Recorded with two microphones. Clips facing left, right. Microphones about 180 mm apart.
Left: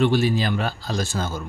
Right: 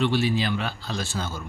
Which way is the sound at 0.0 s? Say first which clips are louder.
Left 3 dB; 45° left (ahead or behind).